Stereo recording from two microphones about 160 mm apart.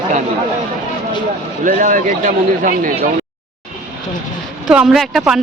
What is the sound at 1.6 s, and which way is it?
A man's voice, 55° right (ahead or behind).